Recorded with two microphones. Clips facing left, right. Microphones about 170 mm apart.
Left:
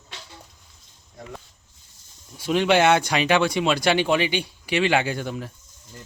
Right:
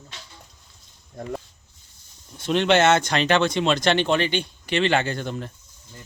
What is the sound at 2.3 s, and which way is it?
A man's voice, 5° left (ahead or behind).